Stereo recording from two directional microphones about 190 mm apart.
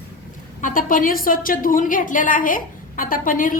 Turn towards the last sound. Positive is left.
turn(degrees=45)  # may be behind; listen again after turning